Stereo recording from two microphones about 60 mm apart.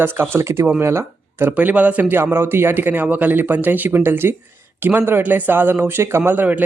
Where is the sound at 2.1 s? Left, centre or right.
Right.